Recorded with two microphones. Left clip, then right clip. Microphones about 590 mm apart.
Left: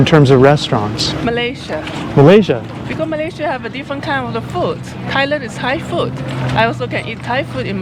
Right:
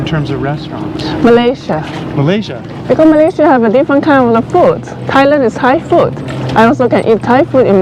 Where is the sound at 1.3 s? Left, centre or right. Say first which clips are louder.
Right 13 dB; right.